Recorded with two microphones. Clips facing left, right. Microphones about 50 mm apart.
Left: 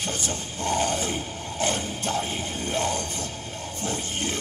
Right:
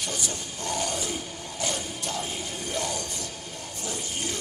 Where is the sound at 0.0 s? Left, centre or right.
Left.